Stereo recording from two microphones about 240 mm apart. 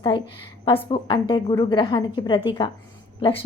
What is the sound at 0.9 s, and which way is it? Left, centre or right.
A woman's voice, left.